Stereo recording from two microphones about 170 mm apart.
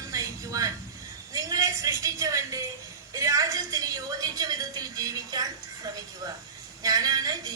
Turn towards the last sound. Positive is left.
turn(degrees=-20)  # may be behind; listen again after turning